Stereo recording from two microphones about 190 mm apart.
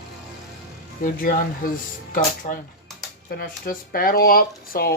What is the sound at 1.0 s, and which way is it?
Speech, 50° left (ahead or behind).